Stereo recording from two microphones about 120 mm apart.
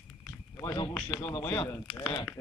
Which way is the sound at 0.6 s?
35° left (ahead or behind).